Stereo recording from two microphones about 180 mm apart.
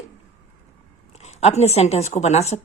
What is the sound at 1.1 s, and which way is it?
A woman's voice, 35° left (ahead or behind).